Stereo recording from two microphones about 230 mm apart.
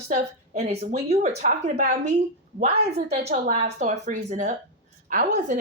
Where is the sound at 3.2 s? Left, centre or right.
Right.